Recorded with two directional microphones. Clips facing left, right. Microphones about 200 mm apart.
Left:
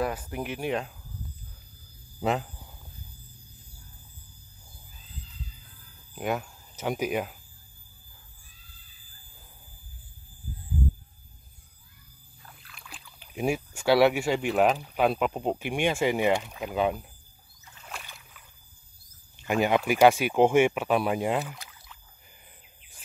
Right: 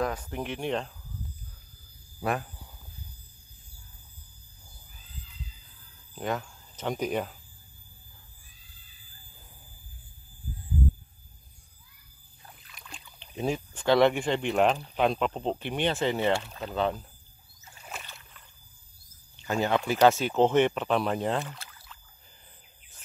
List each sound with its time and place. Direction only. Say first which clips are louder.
0.0 s speech: left 1 dB; 5° left (ahead or behind)
2.1 s speech: left 3 dB; 20° left (ahead or behind)
6.1 s speech: left 2 dB; 10° left (ahead or behind)
12.7 s speech: right 1 dB; centre (ahead or behind)
17.7 s rowboat: even; 5° right (ahead or behind)
19.3 s speech: left 3 dB; 15° left (ahead or behind)